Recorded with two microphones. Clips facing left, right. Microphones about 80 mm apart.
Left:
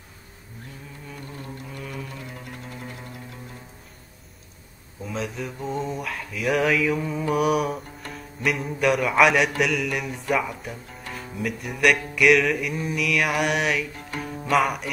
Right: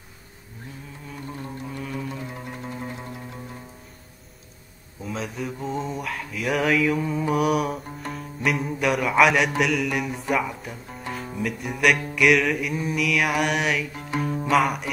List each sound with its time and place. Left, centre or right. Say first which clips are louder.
1.4 s music: right 4 dB; right
5.0 s mantra: even; centre
9.6 s music: right 1 dB; centre